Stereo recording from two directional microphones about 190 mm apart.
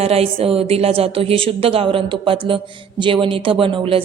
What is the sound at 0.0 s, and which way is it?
A woman's voice, 30° right (ahead or behind).